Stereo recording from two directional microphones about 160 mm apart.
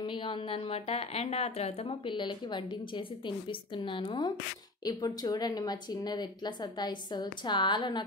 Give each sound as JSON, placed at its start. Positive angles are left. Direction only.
{"t": 0.0, "sound": "a woman's voice", "side_deg": 30}